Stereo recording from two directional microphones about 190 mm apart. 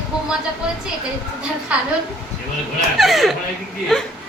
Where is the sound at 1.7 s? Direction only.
5° right (ahead or behind).